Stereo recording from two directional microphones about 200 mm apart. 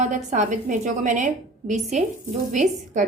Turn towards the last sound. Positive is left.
turn(degrees=-40)  # may be behind; listen again after turning